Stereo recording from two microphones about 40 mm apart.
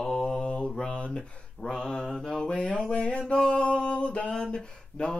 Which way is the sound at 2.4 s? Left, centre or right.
Left.